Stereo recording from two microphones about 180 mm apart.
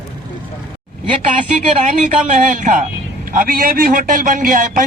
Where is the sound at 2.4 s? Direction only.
45° right (ahead or behind).